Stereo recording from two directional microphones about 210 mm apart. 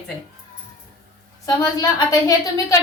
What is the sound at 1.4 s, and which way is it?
Speech, 20° left (ahead or behind).